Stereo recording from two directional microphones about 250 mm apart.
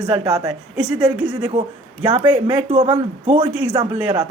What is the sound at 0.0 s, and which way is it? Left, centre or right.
Speech, centre.